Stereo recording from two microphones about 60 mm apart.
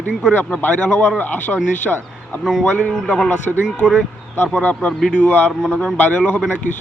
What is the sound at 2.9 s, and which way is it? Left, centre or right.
Speech, centre.